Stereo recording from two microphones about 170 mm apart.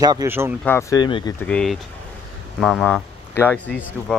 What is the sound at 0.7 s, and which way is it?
Speech, 15° left (ahead or behind).